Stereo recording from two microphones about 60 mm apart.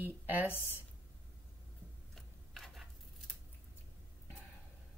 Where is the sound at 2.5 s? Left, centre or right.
Centre.